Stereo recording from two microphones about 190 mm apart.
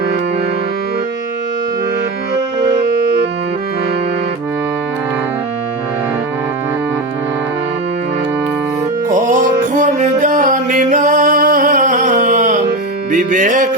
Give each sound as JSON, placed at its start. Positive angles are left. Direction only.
{"t": 9.0, "sound": "music", "side_deg": -40}